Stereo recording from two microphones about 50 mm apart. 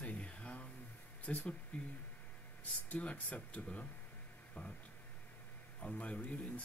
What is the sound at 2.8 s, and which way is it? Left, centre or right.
Speech, left.